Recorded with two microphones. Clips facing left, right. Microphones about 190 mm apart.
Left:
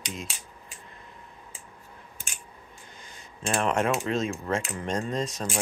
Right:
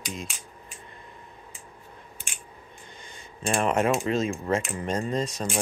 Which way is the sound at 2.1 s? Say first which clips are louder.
Right 1 dB; 40° left (ahead or behind).